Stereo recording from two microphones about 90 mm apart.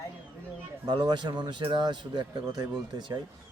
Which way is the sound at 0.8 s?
55° right (ahead or behind).